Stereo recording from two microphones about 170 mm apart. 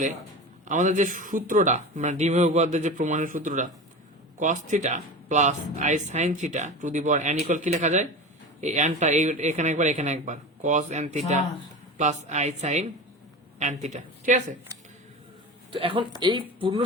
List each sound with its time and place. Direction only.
0.7 s a woman's voice: 45° right (ahead or behind)
15.7 s a woman's voice: 30° right (ahead or behind)